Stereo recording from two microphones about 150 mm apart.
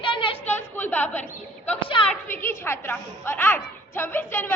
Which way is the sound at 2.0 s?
15° left (ahead or behind).